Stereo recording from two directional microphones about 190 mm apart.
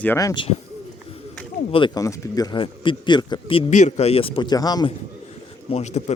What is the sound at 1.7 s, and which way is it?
A man's voice, 25° left (ahead or behind).